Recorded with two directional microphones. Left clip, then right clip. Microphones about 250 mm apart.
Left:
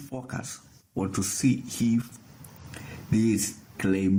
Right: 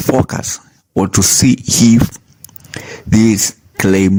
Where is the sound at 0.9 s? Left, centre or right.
Right.